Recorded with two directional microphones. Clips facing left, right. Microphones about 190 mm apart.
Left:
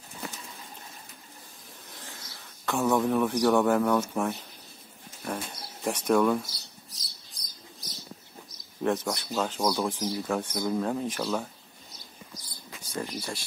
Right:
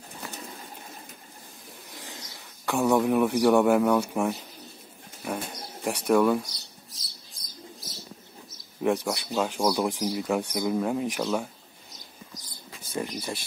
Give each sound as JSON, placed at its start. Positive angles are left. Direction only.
{"t": 2.0, "sound": "speech", "side_deg": -15}
{"t": 5.2, "sound": "bird", "side_deg": -10}
{"t": 8.8, "sound": "speech", "side_deg": -10}
{"t": 12.9, "sound": "speech", "side_deg": -20}